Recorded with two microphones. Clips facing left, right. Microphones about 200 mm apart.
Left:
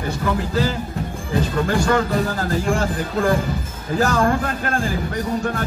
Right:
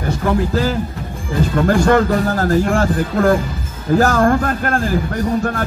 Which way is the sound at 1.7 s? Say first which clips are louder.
Right 7 dB; 50° right (ahead or behind).